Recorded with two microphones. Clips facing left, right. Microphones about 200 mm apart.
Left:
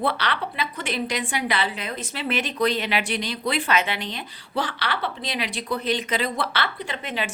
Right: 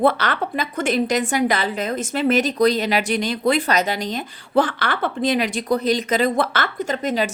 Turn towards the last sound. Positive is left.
turn(degrees=-40)  # may be behind; listen again after turning